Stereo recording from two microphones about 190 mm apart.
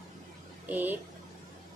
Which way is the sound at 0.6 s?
10° right (ahead or behind).